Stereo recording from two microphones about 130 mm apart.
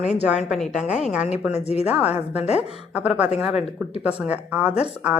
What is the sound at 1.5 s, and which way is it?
Speech, 55° left (ahead or behind).